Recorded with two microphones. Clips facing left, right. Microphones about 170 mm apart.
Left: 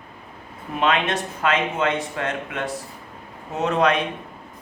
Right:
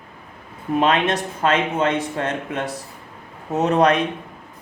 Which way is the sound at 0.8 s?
35° right (ahead or behind).